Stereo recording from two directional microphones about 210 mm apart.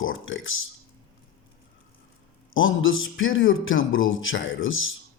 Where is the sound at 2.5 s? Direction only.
70° left (ahead or behind).